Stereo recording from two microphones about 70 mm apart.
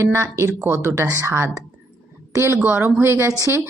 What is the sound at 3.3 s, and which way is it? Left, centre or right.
Speech, right.